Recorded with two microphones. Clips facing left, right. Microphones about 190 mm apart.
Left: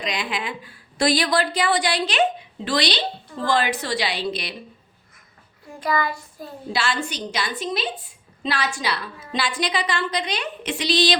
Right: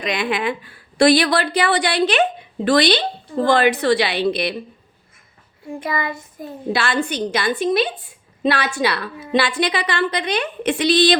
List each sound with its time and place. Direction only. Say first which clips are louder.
0.0 s a woman's voice: right 6 dB; 60° right (ahead or behind)
5.8 s child singing: left 2 dB; 25° right (ahead or behind)
6.7 s a woman's voice: right 4 dB; 55° right (ahead or behind)